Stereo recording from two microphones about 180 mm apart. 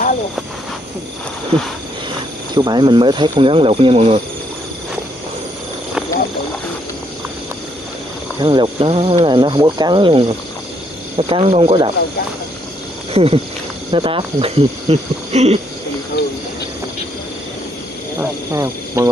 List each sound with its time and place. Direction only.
2.5 s speech: 25° right (ahead or behind)
8.4 s speech: 25° right (ahead or behind)
13.1 s speech: 35° right (ahead or behind)
18.2 s speech: 15° right (ahead or behind)